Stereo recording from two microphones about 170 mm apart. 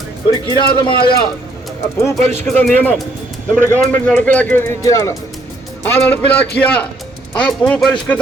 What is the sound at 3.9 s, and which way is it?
Speech, 10° left (ahead or behind).